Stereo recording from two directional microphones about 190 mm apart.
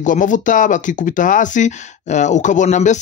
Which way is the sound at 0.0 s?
40° left (ahead or behind).